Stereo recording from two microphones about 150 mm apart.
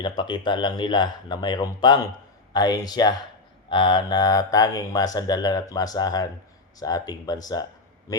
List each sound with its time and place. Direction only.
0.0 s speech: 30° left (ahead or behind)